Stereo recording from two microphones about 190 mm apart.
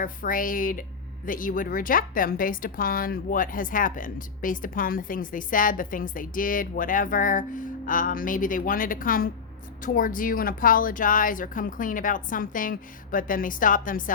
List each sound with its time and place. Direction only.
0.0 s speech: 45° left (ahead or behind)